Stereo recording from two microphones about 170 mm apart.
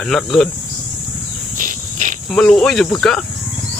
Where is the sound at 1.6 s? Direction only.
50° right (ahead or behind).